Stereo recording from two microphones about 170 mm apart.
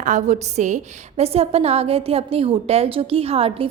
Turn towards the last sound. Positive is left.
turn(degrees=-35)  # may be behind; listen again after turning